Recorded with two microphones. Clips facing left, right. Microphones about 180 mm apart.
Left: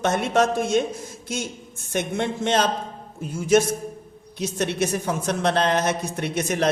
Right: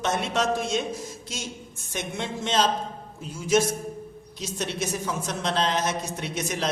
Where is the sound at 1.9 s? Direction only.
55° left (ahead or behind).